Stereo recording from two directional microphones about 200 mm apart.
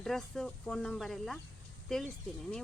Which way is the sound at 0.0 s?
Centre (ahead or behind).